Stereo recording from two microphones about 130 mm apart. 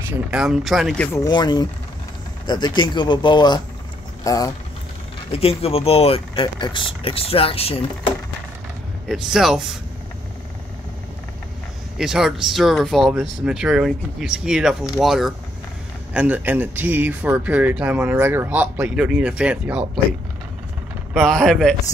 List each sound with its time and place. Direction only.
0.3 s speech: centre (ahead or behind)
0.9 s speech: 10° left (ahead or behind)
1.2 s speech: 35° left (ahead or behind)
5.3 s speech: 50° left (ahead or behind)
9.1 s speech: 5° right (ahead or behind)
12.0 s speech: 5° right (ahead or behind)
21.1 s speech: 5° left (ahead or behind)